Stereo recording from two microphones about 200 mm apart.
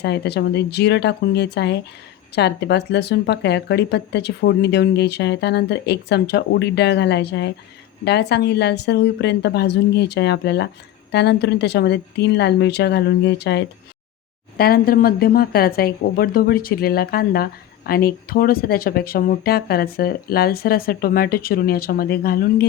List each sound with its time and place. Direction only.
0.0 s speech: 55° left (ahead or behind)
14.6 s a woman's voice: 50° left (ahead or behind)